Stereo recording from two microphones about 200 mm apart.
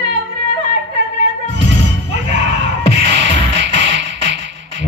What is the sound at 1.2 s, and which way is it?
Music, 65° right (ahead or behind).